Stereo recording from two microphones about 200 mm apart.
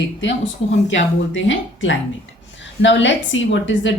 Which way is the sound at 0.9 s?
65° left (ahead or behind).